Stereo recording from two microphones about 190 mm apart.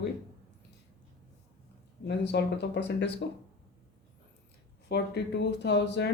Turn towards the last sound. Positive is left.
turn(degrees=65)  # may be behind; listen again after turning